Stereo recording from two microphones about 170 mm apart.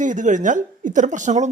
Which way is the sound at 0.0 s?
50° right (ahead or behind).